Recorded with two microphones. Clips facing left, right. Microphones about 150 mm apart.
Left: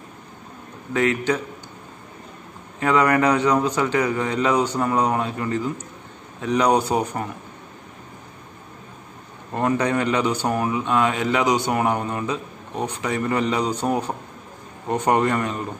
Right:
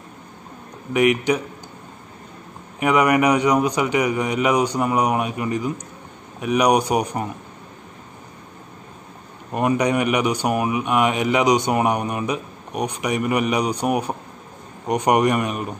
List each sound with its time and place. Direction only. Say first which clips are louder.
0.9 s speech: right 3 dB; 15° right (ahead or behind)
2.8 s speech: right 1 dB; 15° right (ahead or behind)
9.5 s speech: right 2 dB; 15° right (ahead or behind)